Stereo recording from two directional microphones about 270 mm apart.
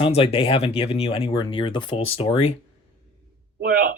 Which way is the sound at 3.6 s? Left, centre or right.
Right.